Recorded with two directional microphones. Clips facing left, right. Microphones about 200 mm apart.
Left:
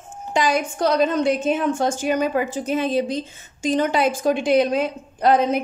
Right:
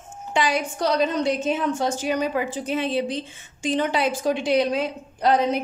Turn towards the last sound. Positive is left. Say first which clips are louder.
# left 3 dB
turn(degrees=50)  # may be behind; listen again after turning